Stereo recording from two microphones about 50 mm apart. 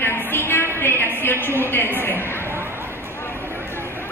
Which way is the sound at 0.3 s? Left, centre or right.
Left.